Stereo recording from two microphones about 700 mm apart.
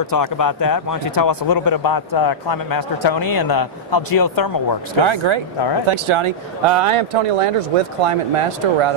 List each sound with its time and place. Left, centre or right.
0.0 s speech: left
5.0 s speech: right